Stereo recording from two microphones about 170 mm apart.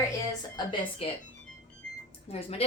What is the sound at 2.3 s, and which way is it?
Speech, 35° left (ahead or behind).